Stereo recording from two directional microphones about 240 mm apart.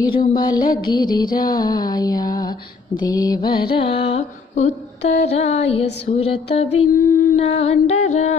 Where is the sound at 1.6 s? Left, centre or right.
Centre.